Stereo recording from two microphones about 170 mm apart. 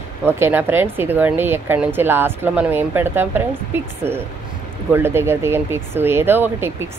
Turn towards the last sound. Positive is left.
turn(degrees=-15)  # may be behind; listen again after turning